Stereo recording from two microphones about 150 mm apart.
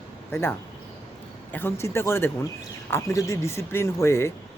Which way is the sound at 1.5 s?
15° left (ahead or behind).